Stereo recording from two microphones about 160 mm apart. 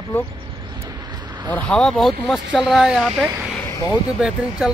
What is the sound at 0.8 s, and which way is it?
Vehicle, 25° right (ahead or behind).